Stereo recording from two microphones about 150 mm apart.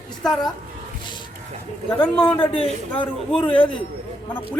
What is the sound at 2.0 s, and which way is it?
Speech, 10° left (ahead or behind).